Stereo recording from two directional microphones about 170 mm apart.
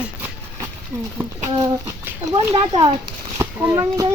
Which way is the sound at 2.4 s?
25° right (ahead or behind).